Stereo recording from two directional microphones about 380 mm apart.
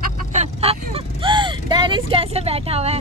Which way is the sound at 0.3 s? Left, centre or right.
Centre.